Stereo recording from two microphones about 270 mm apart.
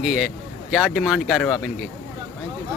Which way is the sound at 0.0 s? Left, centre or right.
Centre.